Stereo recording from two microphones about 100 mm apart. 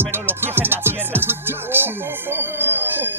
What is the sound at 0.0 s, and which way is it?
Music, 20° right (ahead or behind).